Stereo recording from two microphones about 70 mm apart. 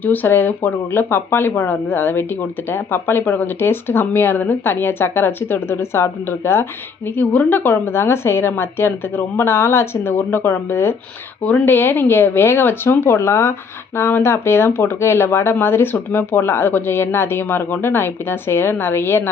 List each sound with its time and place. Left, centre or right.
0.0 s speech: left
7.2 s speech: left
11.4 s speech: left